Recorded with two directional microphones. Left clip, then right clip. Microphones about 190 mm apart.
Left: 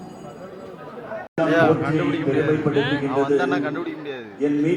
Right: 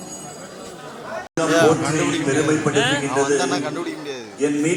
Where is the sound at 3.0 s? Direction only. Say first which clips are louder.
Right 1 dB; 10° right (ahead or behind).